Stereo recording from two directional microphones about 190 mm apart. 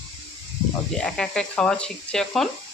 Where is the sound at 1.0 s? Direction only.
5° left (ahead or behind).